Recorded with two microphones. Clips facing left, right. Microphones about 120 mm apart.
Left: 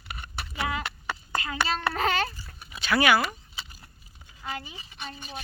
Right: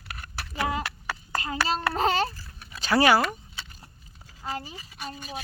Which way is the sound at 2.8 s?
35° right (ahead or behind).